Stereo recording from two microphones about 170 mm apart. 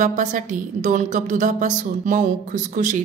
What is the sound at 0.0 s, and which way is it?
A woman's voice, 50° right (ahead or behind).